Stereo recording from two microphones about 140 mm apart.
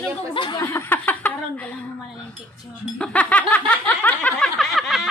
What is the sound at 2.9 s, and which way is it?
Snicker, 10° left (ahead or behind).